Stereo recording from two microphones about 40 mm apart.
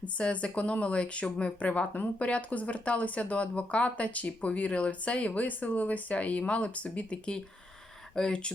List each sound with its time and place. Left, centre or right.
0.2 s speech: left
8.1 s speech: left